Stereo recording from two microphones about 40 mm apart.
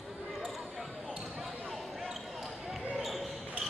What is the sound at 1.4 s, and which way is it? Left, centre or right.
Basketball bounce, centre.